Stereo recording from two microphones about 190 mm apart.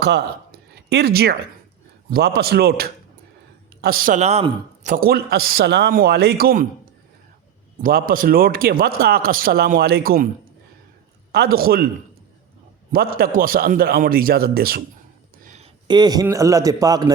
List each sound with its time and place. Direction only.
0.0 s a sound: 60° right (ahead or behind)
2.0 s a man's voice: 55° right (ahead or behind)
7.8 s speech: 50° right (ahead or behind)
11.3 s speech: 55° right (ahead or behind)
12.9 s speech: 50° right (ahead or behind)
15.4 s a sound: 35° right (ahead or behind)
15.9 s a man's voice: 20° right (ahead or behind)